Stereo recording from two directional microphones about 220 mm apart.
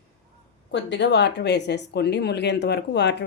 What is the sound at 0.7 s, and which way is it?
Speech, 55° left (ahead or behind).